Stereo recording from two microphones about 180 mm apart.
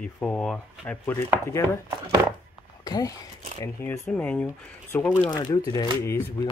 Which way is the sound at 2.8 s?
20° left (ahead or behind).